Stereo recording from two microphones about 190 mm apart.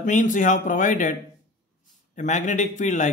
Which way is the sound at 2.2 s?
40° left (ahead or behind).